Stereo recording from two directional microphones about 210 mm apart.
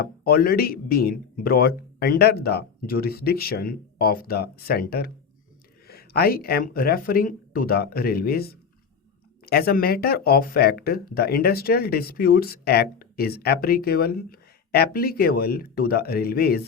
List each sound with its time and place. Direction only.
0.0 s speech: 45° left (ahead or behind)